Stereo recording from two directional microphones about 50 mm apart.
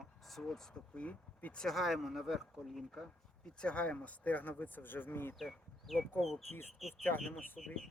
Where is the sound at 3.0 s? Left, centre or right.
Centre; by 5.3 s left.